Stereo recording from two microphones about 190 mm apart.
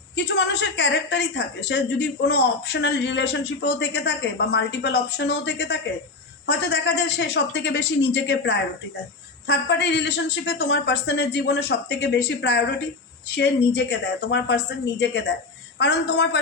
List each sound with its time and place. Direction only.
0.2 s a woman's voice: 65° left (ahead or behind)